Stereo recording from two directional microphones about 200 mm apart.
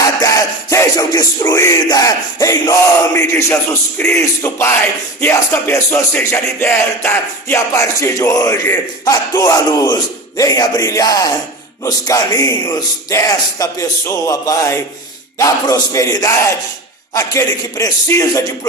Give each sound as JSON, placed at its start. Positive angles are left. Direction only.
{"t": 0.2, "sound": "music", "side_deg": 15}